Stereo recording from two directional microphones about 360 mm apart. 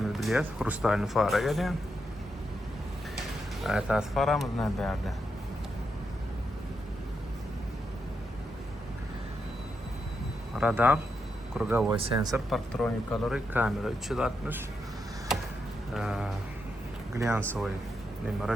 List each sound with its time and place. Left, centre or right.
0.1 s speech: centre
3.6 s speech: centre
10.6 s speech: centre
12.5 s speech: centre
16.0 s speech: centre